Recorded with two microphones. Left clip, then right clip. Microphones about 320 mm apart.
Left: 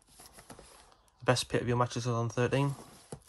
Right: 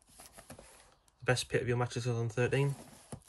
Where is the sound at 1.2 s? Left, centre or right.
Centre.